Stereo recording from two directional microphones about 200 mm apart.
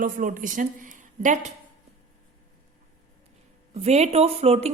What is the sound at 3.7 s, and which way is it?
Speech, 35° right (ahead or behind).